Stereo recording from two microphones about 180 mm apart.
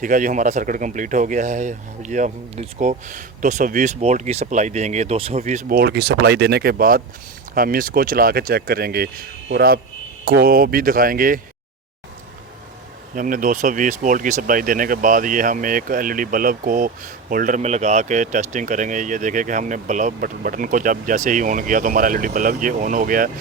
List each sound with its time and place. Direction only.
0.0 s speech: 45° right (ahead or behind)
13.1 s speech: 50° right (ahead or behind)